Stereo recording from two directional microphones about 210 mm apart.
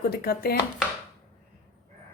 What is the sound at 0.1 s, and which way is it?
Speech, 45° left (ahead or behind).